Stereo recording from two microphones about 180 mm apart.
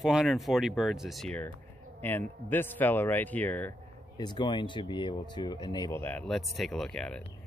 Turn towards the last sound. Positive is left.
turn(degrees=5)  # may be behind; listen again after turning